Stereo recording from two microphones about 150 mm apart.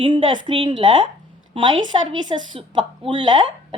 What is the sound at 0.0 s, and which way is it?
A woman's voice, 35° right (ahead or behind).